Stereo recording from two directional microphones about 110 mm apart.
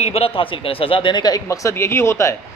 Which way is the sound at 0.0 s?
65° left (ahead or behind).